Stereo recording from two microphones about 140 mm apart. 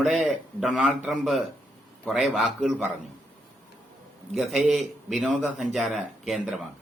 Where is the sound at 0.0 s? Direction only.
Centre (ahead or behind).